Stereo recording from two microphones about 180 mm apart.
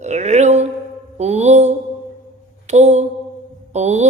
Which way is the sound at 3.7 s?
40° right (ahead or behind).